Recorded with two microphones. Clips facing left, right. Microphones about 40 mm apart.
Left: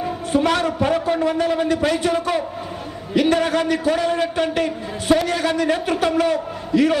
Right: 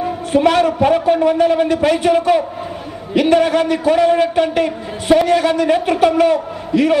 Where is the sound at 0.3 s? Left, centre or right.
Right.